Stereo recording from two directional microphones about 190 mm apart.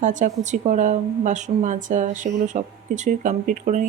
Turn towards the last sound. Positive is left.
turn(degrees=-40)  # may be behind; listen again after turning